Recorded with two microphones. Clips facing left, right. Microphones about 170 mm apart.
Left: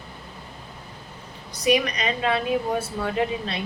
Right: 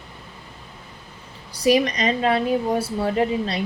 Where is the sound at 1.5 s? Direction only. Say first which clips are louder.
Right 3 dB; 30° right (ahead or behind).